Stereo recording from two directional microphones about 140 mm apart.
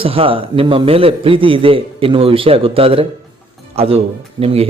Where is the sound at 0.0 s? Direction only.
40° right (ahead or behind).